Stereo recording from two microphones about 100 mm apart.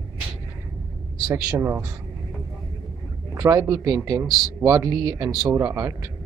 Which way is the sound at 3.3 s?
35° right (ahead or behind).